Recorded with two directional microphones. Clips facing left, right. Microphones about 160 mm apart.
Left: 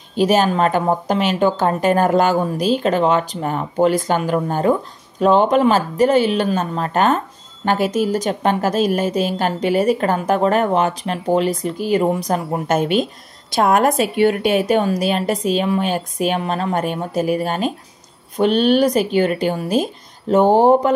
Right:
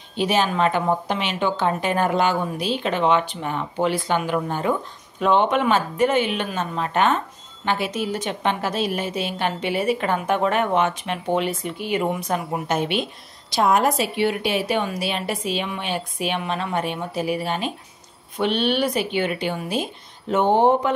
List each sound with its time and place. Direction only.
0.1 s a woman's voice: 40° left (ahead or behind)